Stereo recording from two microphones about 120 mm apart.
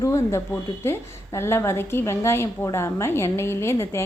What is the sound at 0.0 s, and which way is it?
A woman's voice, 25° left (ahead or behind).